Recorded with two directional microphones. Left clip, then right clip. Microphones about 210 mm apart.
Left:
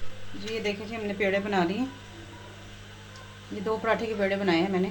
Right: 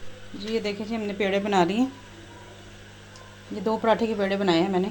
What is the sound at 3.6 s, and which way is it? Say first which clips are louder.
A woman's voice: right 4 dB; 30° right (ahead or behind).